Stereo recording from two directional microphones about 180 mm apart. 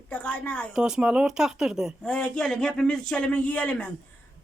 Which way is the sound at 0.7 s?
5° right (ahead or behind).